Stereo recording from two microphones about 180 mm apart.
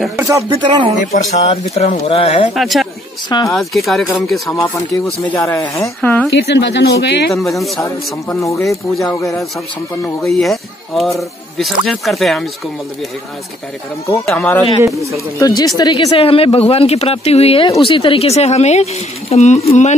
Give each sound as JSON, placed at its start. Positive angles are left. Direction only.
{"t": 0.2, "sound": "speech", "side_deg": -15}
{"t": 1.3, "sound": "speech", "side_deg": 35}
{"t": 2.5, "sound": "speech", "side_deg": 0}
{"t": 3.3, "sound": "speech", "side_deg": 25}
{"t": 3.5, "sound": "speech", "side_deg": 0}
{"t": 4.5, "sound": "speech", "side_deg": 20}
{"t": 6.3, "sound": "speech", "side_deg": 75}
{"t": 7.3, "sound": "speech", "side_deg": 0}
{"t": 14.2, "sound": "speech", "side_deg": 10}